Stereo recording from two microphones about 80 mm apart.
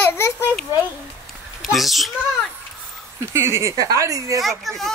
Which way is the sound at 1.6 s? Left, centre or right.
Centre.